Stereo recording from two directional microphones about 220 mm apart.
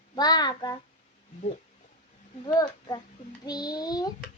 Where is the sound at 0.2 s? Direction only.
20° left (ahead or behind).